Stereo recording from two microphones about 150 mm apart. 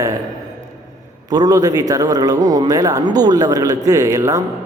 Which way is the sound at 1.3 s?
25° right (ahead or behind).